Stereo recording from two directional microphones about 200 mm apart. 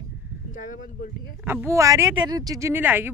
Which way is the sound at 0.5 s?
40° left (ahead or behind).